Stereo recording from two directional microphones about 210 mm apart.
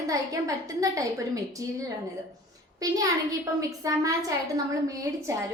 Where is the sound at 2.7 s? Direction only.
15° right (ahead or behind).